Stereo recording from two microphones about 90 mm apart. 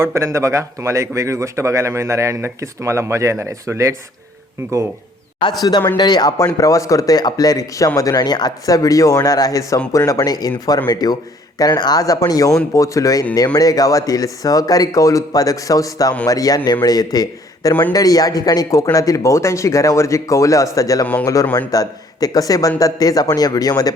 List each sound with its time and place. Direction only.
0.0 s a man's voice: 30° right (ahead or behind)
5.4 s speech: 60° left (ahead or behind)
6.0 s a man's voice: 50° left (ahead or behind)
6.5 s a man's voice: 40° left (ahead or behind)